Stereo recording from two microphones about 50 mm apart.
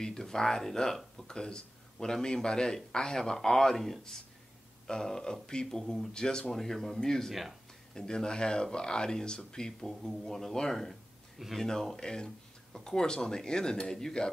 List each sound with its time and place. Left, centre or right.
0.0 s speech: centre
11.6 s speech: centre